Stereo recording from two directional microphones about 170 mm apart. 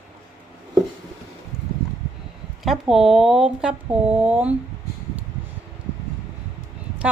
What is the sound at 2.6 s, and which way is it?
Speech, centre (ahead or behind).